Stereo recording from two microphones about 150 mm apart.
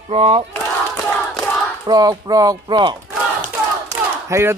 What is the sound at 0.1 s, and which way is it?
Battle cry, 40° right (ahead or behind).